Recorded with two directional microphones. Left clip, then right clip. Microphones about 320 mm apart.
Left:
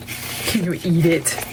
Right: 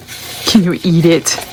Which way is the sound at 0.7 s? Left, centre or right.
Centre.